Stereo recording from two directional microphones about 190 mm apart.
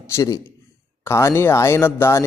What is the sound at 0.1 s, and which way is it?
Speech, 15° left (ahead or behind).